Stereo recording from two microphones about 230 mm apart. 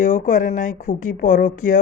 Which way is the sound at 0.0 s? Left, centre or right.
Left.